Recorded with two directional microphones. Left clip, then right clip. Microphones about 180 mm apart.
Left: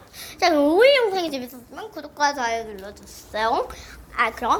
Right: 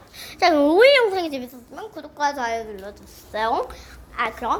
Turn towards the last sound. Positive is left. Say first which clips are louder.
# left 3 dB
turn(degrees=5)  # may be behind; listen again after turning